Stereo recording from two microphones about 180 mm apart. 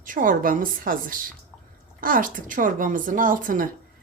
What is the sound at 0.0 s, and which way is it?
Speech, 50° right (ahead or behind).